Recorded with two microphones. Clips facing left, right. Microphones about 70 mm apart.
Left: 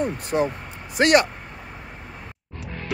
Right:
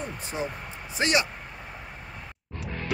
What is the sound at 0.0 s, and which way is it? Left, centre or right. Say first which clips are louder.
Speech: left 10 dB; left.